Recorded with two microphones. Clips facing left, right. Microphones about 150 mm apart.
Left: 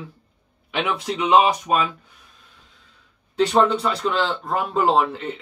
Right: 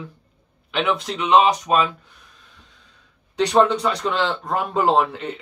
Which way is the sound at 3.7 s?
5° left (ahead or behind).